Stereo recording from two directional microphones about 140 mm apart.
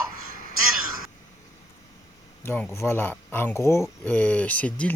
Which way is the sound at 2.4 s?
15° left (ahead or behind).